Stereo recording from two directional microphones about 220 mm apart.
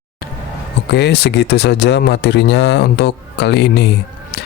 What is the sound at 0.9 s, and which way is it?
Speech, 50° left (ahead or behind).